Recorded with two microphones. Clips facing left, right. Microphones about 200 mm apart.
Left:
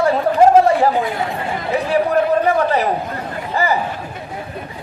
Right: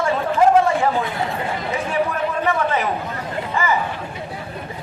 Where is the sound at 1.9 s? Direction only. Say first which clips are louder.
Left 8 dB; 35° left (ahead or behind).